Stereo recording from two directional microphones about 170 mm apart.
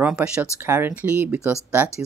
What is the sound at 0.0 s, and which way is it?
Speech, 5° right (ahead or behind).